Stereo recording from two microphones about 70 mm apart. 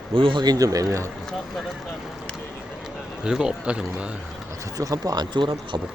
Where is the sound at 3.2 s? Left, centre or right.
Centre.